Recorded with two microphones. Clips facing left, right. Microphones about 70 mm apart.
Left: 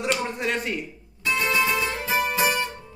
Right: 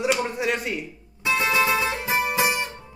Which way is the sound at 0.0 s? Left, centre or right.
Centre.